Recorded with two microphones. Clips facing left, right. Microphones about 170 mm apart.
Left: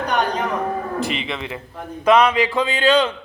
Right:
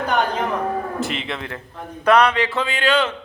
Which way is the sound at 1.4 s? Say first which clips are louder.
Left 2 dB; 10° left (ahead or behind).